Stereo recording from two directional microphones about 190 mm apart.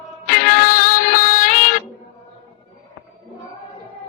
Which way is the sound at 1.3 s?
45° left (ahead or behind).